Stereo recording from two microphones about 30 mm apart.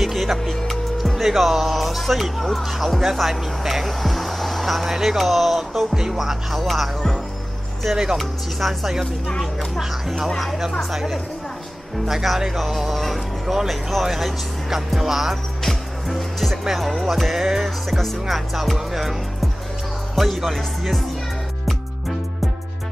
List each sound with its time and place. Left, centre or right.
0.0 s music: centre
1.2 s speech: centre
5.9 s speech: centre
7.9 s speech: centre
8.2 s speech: centre
15.6 s music: centre
16.7 s speech: centre
17.0 s speech: centre
18.3 s speech: centre